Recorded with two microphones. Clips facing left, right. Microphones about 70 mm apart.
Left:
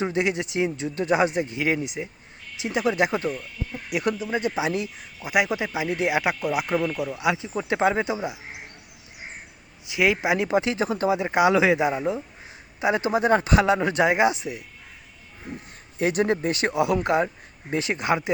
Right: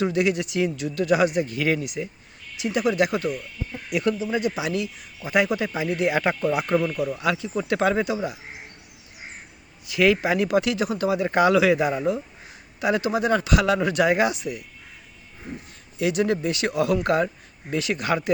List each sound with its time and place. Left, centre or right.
0.0 s speech: left
3.8 s speech: centre
4.3 s speech: left
5.2 s speech: centre
7.1 s speech: centre
9.8 s speech: centre
16.0 s speech: left
16.7 s speech: left